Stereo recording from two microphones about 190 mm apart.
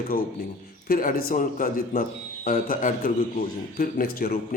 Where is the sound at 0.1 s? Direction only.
45° left (ahead or behind).